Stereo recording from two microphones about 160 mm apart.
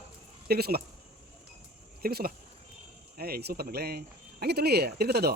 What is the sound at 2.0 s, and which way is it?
Speech, 70° right (ahead or behind).